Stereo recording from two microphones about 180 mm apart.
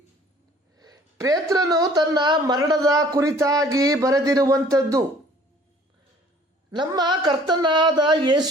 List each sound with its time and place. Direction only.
0.8 s a woman's voice: 20° right (ahead or behind)
6.7 s a woman's voice: 25° right (ahead or behind)